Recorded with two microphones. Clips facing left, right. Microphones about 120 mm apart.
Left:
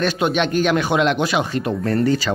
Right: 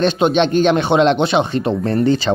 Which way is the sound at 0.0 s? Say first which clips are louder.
Right 5 dB; 25° right (ahead or behind).